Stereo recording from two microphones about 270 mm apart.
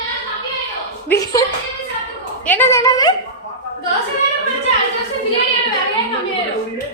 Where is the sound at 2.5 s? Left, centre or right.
Centre.